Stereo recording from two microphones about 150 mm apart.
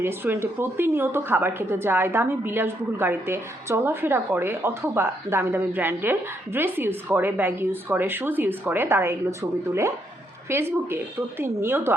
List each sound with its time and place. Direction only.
0.0 s a woman's voice: 15° right (ahead or behind)